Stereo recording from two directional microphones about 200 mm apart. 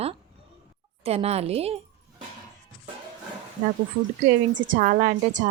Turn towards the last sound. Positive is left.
turn(degrees=-40)  # may be behind; listen again after turning